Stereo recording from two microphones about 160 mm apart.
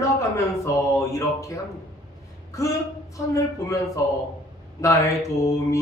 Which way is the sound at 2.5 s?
20° left (ahead or behind).